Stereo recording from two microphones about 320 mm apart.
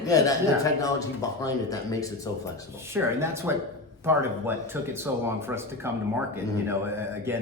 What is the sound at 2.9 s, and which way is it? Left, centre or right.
Speech, centre.